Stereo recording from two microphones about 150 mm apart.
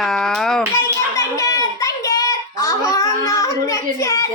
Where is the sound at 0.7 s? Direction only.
20° left (ahead or behind).